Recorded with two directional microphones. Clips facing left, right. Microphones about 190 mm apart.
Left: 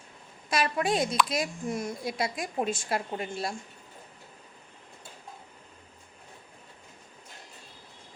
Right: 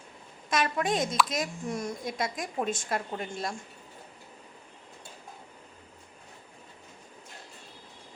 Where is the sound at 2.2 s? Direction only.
30° left (ahead or behind).